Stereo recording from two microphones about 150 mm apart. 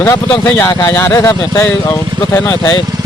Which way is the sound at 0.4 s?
15° left (ahead or behind).